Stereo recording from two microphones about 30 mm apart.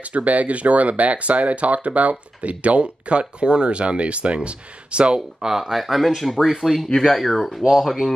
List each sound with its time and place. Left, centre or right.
0.0 s speech: right
5.4 s speech: centre
5.9 s speech: centre